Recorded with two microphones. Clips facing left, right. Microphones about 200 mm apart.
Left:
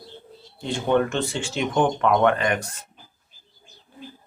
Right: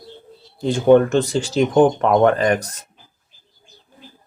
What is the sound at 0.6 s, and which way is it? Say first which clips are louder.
Speech: right 9 dB; 40° right (ahead or behind).